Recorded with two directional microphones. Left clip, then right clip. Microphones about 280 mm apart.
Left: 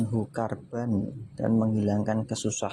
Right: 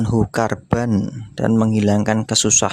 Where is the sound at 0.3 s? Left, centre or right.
Right.